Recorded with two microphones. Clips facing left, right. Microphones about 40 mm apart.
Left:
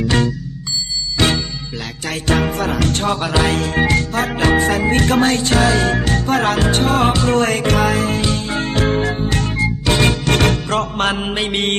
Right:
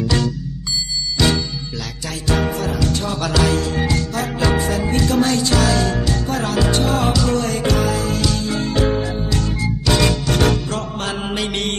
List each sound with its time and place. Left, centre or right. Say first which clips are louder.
0.0 s music: left 3 dB; left
3.2 s music: left 1 dB; left
3.5 s music: left 3 dB; left
8.8 s music: left 2 dB; left
10.3 s music: left 2 dB; left